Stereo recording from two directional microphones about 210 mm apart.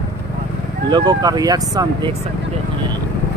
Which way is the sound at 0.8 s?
20° right (ahead or behind).